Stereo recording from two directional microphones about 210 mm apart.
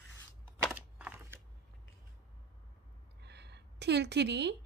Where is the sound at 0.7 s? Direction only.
5° right (ahead or behind).